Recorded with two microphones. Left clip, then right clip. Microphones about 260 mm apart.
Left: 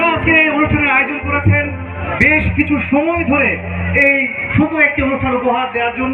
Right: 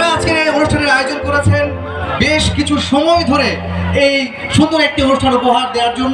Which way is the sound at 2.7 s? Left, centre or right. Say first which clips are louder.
Right 5 dB; right.